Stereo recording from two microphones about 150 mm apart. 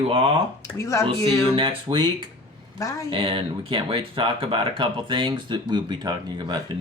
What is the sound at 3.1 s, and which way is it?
Speech, 35° right (ahead or behind).